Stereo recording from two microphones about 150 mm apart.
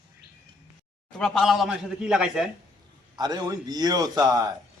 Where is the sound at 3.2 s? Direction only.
25° right (ahead or behind).